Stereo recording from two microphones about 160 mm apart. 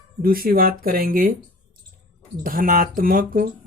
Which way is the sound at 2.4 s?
60° right (ahead or behind).